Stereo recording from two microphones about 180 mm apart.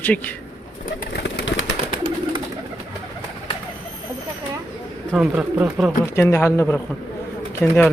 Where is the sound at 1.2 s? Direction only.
85° left.